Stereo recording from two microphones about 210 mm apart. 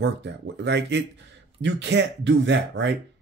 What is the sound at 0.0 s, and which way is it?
Speech, 55° right (ahead or behind).